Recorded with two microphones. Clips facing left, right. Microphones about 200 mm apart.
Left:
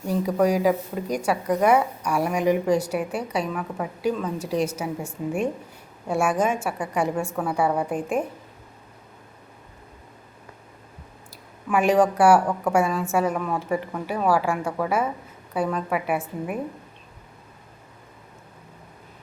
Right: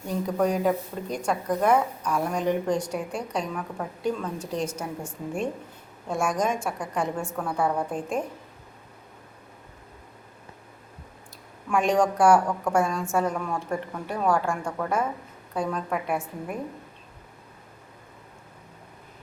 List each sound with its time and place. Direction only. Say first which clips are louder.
0.1 s speech: left 4 dB; 10° left (ahead or behind)
11.3 s speech: left 2 dB; 5° left (ahead or behind)